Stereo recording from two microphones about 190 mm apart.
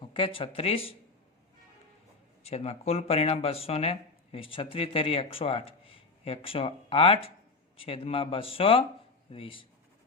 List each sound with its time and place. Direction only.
0.1 s speech: 30° left (ahead or behind)
2.4 s speech: 35° left (ahead or behind)